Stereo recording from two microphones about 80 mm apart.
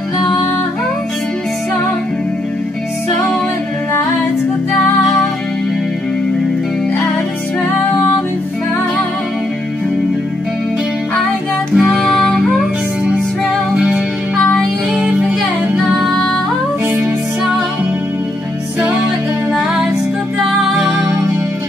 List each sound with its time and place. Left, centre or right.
11.7 s music: centre
13.7 s music: centre
14.3 s music: centre
15.0 s music: centre
19.5 s music: centre
21.0 s music: right